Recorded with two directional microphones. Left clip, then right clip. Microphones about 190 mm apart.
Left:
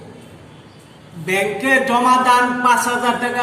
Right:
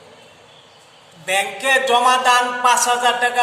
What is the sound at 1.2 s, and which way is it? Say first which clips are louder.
A man's voice: left 1 dB; 40° right (ahead or behind).